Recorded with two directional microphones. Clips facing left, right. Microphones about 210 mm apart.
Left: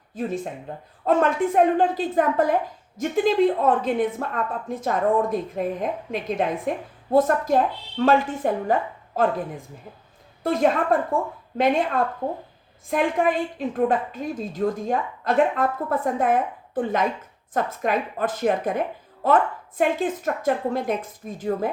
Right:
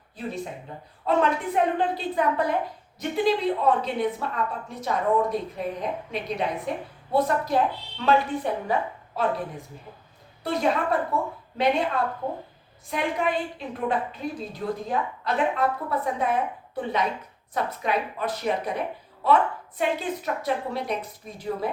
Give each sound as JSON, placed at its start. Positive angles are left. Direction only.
{"t": 0.1, "sound": "a woman's voice", "side_deg": 45}